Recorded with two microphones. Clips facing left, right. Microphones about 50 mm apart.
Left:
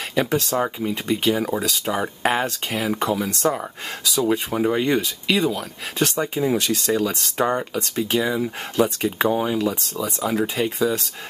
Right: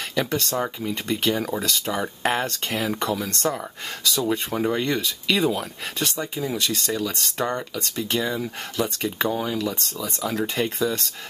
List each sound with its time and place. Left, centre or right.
0.1 s speech: centre
6.1 s speech: left; by 11.0 s centre